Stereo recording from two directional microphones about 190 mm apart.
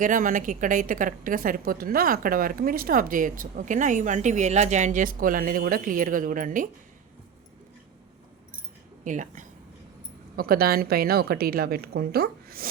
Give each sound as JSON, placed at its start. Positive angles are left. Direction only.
{"t": 0.0, "sound": "a woman's voice", "side_deg": -45}
{"t": 9.0, "sound": "speech", "side_deg": -40}
{"t": 10.3, "sound": "a woman's voice", "side_deg": -50}